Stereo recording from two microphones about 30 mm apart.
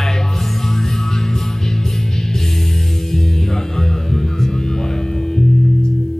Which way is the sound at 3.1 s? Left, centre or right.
Centre.